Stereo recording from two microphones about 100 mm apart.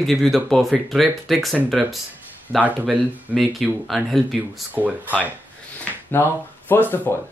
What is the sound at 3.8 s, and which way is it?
Speech, centre (ahead or behind).